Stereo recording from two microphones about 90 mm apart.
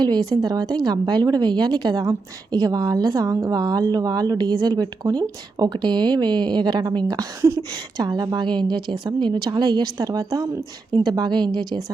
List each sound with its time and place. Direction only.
0.0 s a woman's voice: 50° right (ahead or behind)
8.4 s speech: 55° right (ahead or behind)
9.5 s a woman's voice: 50° right (ahead or behind)
10.9 s a woman's voice: 55° right (ahead or behind)